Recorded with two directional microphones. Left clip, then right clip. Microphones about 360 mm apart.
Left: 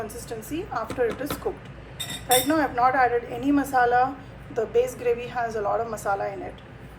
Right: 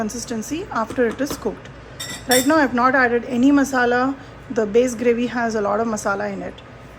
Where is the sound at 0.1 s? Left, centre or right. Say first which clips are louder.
Right 6 dB; right.